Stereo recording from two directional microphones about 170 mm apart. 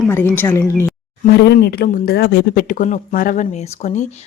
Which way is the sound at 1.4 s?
70° left (ahead or behind).